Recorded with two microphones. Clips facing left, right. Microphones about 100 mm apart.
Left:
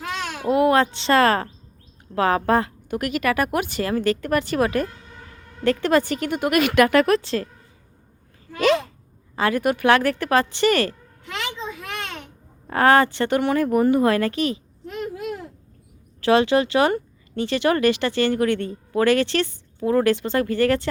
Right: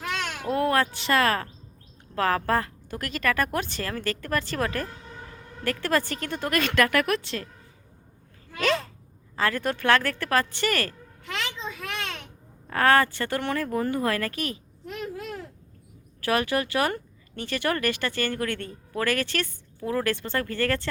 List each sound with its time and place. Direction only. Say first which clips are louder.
0.3 s speech: left 8 dB; 10° left (ahead or behind); by 1.5 s 30° left (ahead or behind)
2.1 s speech: left 5 dB; 20° left (ahead or behind)
8.5 s speech: left 6 dB; 15° left (ahead or behind)
11.3 s a sound: left 3 dB; 10° left (ahead or behind)
12.7 s speech: left 4 dB; 20° left (ahead or behind)
15.0 s a sound: left 5 dB; 10° left (ahead or behind)
16.2 s speech: left 8 dB; 25° left (ahead or behind)